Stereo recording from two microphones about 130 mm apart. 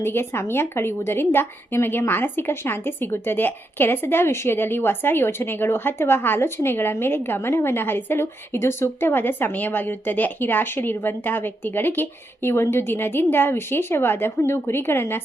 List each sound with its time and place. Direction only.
0.0 s a woman's voice: 20° left (ahead or behind)